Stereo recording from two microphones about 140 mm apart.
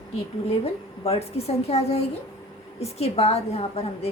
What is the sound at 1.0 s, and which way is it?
A woman's voice, 45° left (ahead or behind).